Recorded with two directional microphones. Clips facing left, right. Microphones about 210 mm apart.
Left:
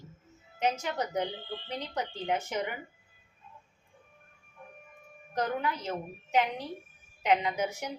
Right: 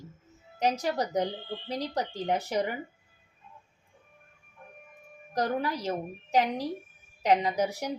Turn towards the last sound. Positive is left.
turn(degrees=-35)  # may be behind; listen again after turning